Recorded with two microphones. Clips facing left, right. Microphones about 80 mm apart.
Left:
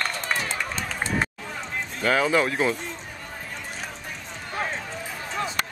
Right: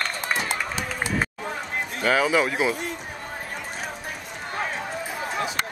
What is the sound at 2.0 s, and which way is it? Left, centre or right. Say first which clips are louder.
Speech: even; centre.